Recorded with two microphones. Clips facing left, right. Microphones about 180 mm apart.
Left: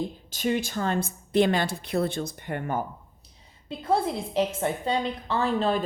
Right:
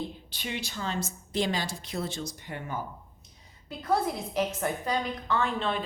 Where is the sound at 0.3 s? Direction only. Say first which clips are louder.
Left 10 dB; 45° left (ahead or behind).